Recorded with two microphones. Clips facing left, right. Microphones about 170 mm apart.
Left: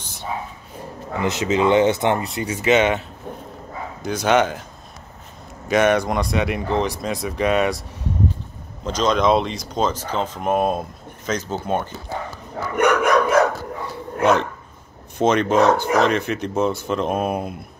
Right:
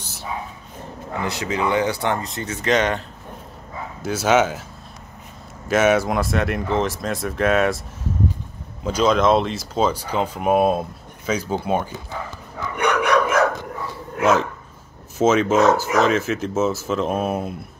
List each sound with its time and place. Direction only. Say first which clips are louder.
0.0 s bow-wow: left 1 dB; 5° right (ahead or behind)
1.2 s speech: left 5 dB; 20° left (ahead or behind)
4.0 s speech: even; 5° right (ahead or behind)
5.7 s speech: even; 5° right (ahead or behind)
12.7 s bow-wow: left 2 dB; 40° left (ahead or behind)
15.1 s speech: even; 5° right (ahead or behind)